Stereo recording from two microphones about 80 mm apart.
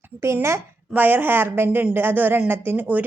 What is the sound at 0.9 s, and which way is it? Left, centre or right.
Speech, right.